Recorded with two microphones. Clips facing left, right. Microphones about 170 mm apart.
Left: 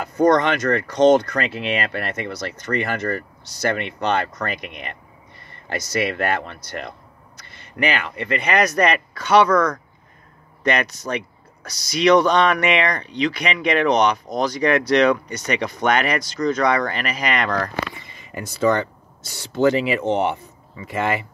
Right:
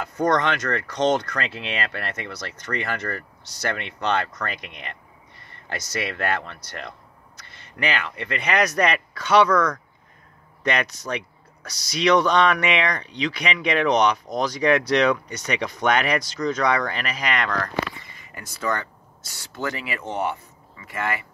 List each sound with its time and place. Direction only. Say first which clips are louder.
0.0 s speech: left 5 dB; 10° left (ahead or behind)
18.1 s speech: left 9 dB; 20° left (ahead or behind)